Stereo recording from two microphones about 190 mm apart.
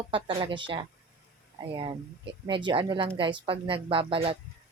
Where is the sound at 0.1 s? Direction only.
25° right (ahead or behind).